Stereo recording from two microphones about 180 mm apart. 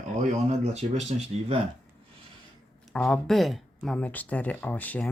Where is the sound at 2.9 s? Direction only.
5° left (ahead or behind).